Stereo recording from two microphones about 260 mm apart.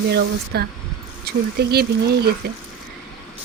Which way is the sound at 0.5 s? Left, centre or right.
Right.